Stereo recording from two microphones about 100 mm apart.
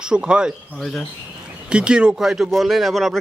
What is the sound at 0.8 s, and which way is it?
Speech, centre (ahead or behind).